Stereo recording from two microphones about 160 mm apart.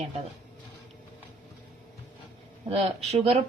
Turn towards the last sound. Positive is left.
turn(degrees=-40)  # may be behind; listen again after turning